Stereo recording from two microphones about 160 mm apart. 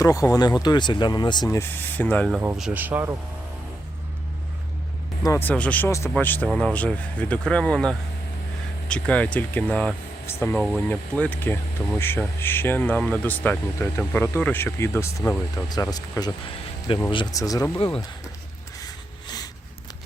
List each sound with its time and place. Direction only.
0.0 s speech: 20° left (ahead or behind)
2.3 s speech: 10° right (ahead or behind)
5.2 s speech: 15° left (ahead or behind)